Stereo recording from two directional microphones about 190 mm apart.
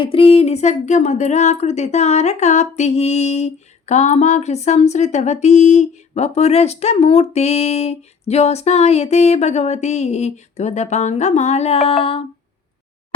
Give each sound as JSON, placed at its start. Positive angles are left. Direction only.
{"t": 0.0, "sound": "speech", "side_deg": 30}